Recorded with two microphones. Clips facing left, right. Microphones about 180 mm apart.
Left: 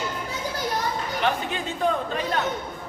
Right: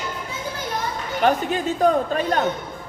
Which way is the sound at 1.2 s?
40° right (ahead or behind).